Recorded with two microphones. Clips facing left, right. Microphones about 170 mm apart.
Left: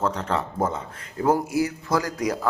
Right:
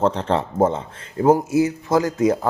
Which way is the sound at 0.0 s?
30° right (ahead or behind).